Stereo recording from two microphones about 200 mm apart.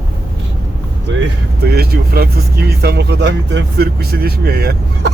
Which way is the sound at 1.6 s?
50° right (ahead or behind).